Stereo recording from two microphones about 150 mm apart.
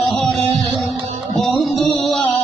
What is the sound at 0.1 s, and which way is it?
Music, centre (ahead or behind).